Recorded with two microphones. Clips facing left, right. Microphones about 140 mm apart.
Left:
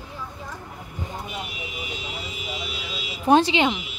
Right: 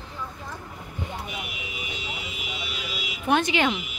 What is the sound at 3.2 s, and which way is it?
Speech, 30° left (ahead or behind).